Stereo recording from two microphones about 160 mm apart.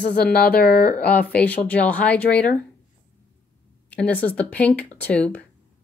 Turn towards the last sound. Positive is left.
turn(degrees=10)  # may be behind; listen again after turning